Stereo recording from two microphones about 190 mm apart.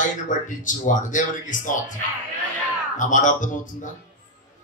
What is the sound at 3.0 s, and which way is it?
Speech, 40° left (ahead or behind).